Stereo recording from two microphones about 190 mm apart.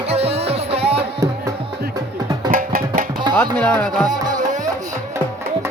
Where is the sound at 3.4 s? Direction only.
10° left (ahead or behind).